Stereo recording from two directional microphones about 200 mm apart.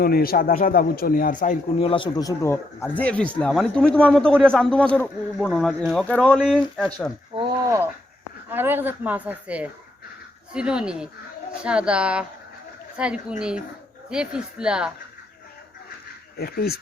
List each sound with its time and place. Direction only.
0.0 s a man's voice: 50° left (ahead or behind)
1.8 s speech: 25° left (ahead or behind); by 6.9 s 5° left (ahead or behind)
7.3 s speech: 25° right (ahead or behind)
8.4 s a woman's voice: 10° right (ahead or behind)
16.4 s a man's voice: 50° left (ahead or behind)